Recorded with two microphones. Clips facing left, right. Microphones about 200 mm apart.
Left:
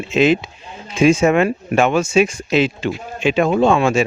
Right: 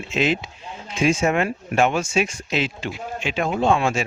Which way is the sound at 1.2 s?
90° left.